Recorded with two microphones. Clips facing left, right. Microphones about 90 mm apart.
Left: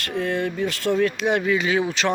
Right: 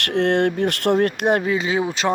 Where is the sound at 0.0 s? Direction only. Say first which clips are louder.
Right 6 dB; 65° right (ahead or behind).